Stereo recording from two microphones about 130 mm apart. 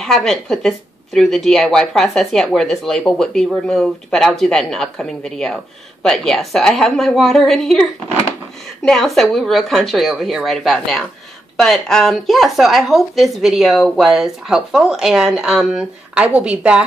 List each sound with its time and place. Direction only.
0.0 s speech: 5° left (ahead or behind)
8.8 s a woman's voice: centre (ahead or behind)